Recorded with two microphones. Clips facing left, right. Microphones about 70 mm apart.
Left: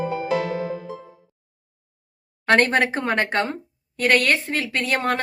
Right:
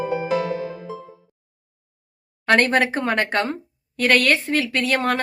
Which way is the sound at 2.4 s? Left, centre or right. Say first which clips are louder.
Even; left.